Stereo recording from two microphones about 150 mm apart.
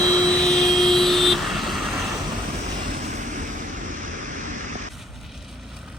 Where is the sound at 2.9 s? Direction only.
50° right (ahead or behind).